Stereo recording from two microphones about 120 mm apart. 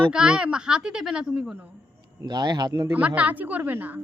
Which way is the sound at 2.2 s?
35° right (ahead or behind).